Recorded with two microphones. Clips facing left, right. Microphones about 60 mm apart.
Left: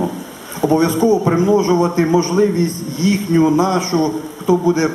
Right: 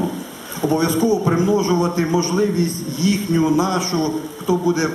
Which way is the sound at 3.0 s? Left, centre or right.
Left.